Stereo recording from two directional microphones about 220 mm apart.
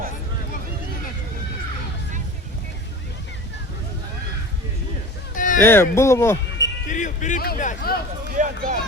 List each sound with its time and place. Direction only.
5.3 s a sound: 35° left (ahead or behind)
5.6 s speech: 10° left (ahead or behind)
6.8 s speech: 35° left (ahead or behind)
8.3 s run: 40° right (ahead or behind)